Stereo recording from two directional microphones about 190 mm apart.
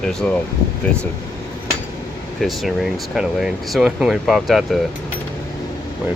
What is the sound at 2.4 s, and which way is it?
Speech, centre (ahead or behind).